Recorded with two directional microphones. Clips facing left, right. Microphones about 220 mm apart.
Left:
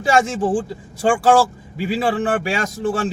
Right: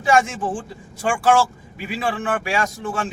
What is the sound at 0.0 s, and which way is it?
A man's voice, 35° left (ahead or behind).